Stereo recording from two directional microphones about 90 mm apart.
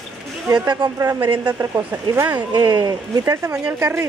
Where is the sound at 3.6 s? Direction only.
15° right (ahead or behind).